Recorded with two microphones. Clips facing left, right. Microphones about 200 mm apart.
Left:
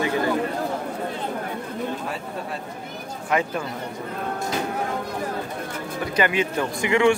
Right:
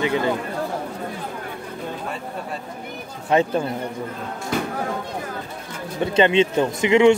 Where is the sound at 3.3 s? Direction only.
30° right (ahead or behind).